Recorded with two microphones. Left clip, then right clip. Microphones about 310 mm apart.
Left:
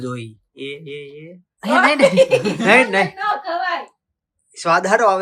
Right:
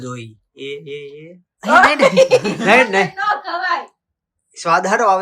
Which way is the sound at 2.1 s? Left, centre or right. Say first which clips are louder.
Right 2 dB; right.